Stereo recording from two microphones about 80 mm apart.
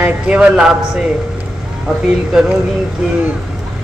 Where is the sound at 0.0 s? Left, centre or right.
Centre.